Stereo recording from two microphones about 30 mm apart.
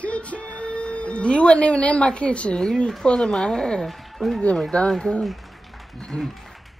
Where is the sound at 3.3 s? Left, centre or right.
Centre.